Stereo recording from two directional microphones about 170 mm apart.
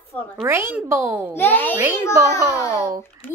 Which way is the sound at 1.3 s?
10° left (ahead or behind).